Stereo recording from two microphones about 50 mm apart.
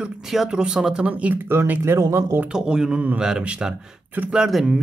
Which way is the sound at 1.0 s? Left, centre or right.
Right.